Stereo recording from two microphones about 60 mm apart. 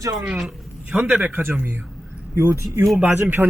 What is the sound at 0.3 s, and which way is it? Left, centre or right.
Speech, centre.